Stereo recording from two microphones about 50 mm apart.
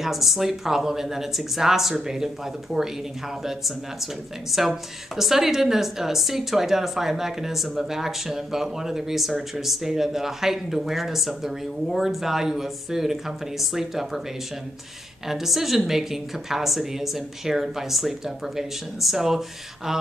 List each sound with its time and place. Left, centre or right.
0.0 s speech: centre
15.2 s speech: centre